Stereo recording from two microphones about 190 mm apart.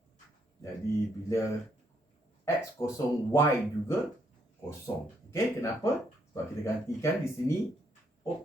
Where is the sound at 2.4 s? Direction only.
15° left (ahead or behind).